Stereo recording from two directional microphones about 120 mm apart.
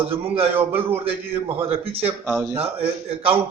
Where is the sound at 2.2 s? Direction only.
15° right (ahead or behind).